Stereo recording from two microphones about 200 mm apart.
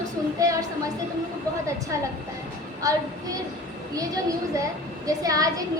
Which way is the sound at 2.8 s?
15° right (ahead or behind).